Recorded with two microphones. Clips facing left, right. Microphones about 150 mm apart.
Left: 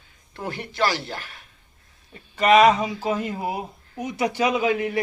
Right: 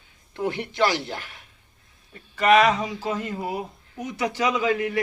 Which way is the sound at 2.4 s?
20° left (ahead or behind).